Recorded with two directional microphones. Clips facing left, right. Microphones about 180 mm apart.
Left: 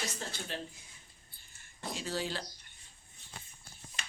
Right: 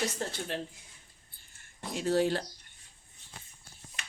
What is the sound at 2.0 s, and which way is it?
Speech, 55° right (ahead or behind).